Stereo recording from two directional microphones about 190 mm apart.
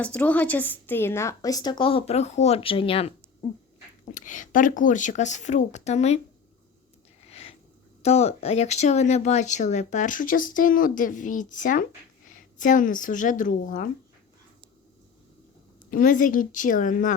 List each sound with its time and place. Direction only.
0.0 s a woman's voice: 5° left (ahead or behind); by 3.1 s 30° left (ahead or behind)
4.1 s speech: 40° left (ahead or behind)
7.2 s a sound: 35° left (ahead or behind)
8.0 s a woman's voice: 35° left (ahead or behind)
15.9 s a woman's voice: 45° left (ahead or behind)